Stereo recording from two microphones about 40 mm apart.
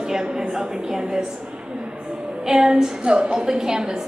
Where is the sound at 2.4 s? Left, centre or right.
Centre.